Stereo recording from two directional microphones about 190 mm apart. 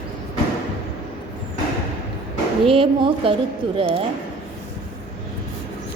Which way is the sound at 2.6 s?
30° right (ahead or behind).